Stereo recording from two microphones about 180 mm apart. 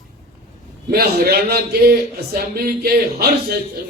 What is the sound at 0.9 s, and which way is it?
A man's voice, 60° right (ahead or behind).